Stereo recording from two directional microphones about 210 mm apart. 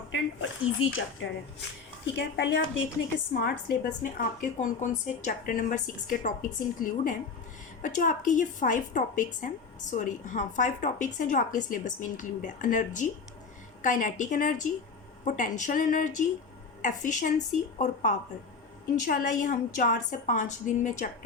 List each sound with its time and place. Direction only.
0.1 s speech: 60° left (ahead or behind)
2.1 s a woman's voice: 55° left (ahead or behind); by 21.1 s 35° left (ahead or behind)